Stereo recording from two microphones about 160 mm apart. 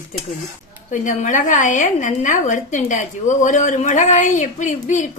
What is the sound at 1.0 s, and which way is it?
A woman's voice, 50° left (ahead or behind).